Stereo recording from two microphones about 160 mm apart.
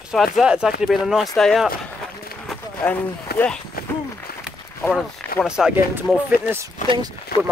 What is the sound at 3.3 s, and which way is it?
Speech, 75° left (ahead or behind).